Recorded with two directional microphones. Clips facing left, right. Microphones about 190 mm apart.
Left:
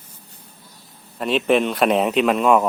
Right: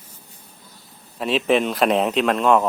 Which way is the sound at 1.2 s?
Centre (ahead or behind).